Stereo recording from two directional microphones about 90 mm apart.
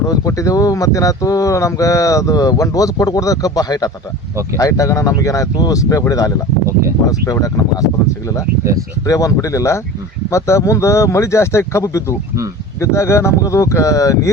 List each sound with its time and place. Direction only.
0.1 s speech: 40° left (ahead or behind)
9.0 s speech: 35° left (ahead or behind)